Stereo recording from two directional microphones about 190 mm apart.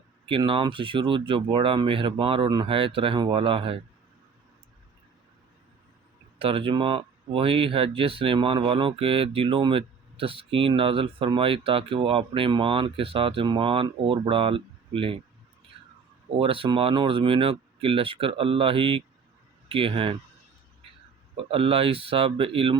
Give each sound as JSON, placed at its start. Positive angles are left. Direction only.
{"t": 0.3, "sound": "speech", "side_deg": -25}
{"t": 6.4, "sound": "speech", "side_deg": -30}
{"t": 16.4, "sound": "speech", "side_deg": -30}
{"t": 21.3, "sound": "speech", "side_deg": -30}